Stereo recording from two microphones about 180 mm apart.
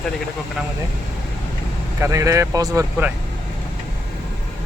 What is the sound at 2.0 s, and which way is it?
Speech, 15° right (ahead or behind).